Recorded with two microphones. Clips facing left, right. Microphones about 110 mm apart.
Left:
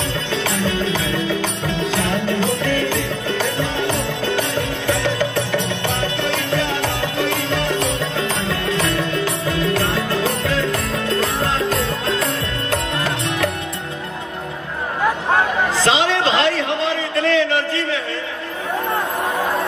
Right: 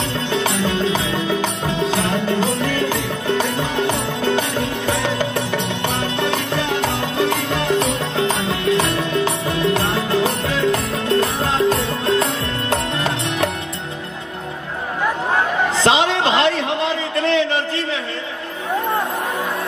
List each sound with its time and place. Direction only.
0.3 s music: 20° right (ahead or behind)
4.8 s music: 20° right (ahead or behind)
12.6 s music: 25° right (ahead or behind)
15.8 s a sound: 25° right (ahead or behind)